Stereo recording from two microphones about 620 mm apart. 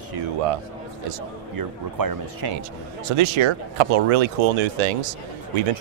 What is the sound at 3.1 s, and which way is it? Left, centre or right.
Speech, right.